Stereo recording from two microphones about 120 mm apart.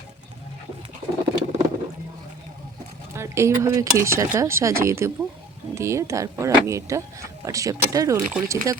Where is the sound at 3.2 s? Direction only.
25° right (ahead or behind).